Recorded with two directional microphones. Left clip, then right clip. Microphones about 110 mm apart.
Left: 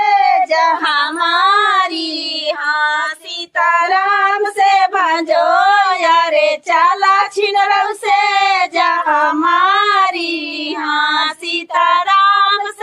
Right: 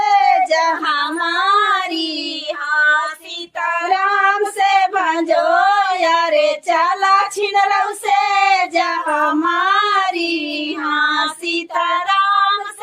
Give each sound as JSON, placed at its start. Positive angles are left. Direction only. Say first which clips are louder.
{"t": 0.0, "sound": "child singing", "louder": "left 1 dB", "side_deg": -25}
{"t": 0.9, "sound": "child singing", "louder": "left 3 dB", "side_deg": 50}
{"t": 3.6, "sound": "child singing", "louder": "left 4 dB", "side_deg": 45}
{"t": 4.4, "sound": "child singing", "louder": "left 3 dB", "side_deg": -25}
{"t": 4.7, "sound": "child singing", "louder": "left 3 dB", "side_deg": 40}